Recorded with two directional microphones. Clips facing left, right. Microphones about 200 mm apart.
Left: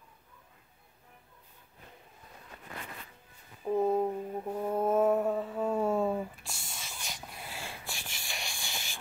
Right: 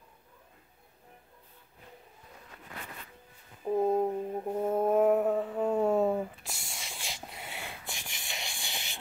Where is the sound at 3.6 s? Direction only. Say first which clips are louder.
Right 1 dB; 10° right (ahead or behind).